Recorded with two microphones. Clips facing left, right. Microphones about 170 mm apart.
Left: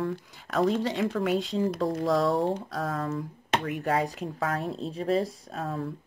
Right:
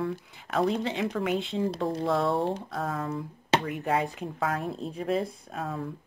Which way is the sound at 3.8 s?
40° left (ahead or behind).